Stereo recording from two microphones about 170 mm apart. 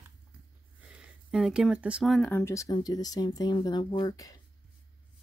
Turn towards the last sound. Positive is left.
turn(degrees=20)  # may be behind; listen again after turning